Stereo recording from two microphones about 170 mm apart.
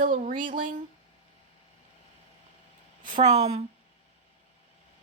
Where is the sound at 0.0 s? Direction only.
50° right (ahead or behind).